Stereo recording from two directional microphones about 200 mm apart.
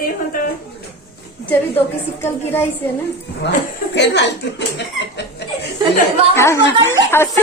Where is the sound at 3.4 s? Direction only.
60° left (ahead or behind).